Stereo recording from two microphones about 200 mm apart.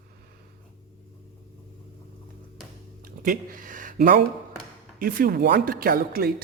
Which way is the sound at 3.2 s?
45° right (ahead or behind).